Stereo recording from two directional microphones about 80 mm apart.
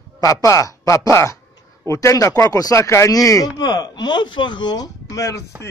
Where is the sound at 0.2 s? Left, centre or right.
Left.